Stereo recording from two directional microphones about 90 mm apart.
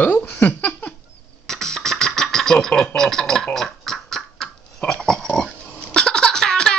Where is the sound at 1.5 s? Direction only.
5° left (ahead or behind).